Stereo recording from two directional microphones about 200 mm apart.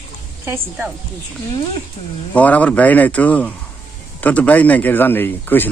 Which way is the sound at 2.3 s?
5° left (ahead or behind).